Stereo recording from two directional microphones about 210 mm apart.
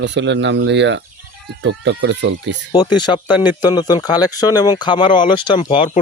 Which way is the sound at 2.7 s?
20° left (ahead or behind).